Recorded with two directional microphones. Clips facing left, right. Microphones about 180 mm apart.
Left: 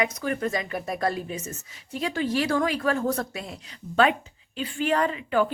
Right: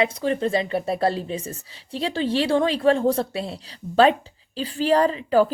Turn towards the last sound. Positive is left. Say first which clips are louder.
# right 6 dB
turn(degrees=-35)  # may be behind; listen again after turning